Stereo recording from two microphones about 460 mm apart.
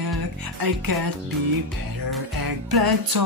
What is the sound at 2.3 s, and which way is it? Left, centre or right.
Music, right.